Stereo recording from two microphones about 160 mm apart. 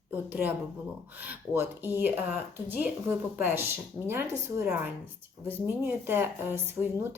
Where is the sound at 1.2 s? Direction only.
10° right (ahead or behind).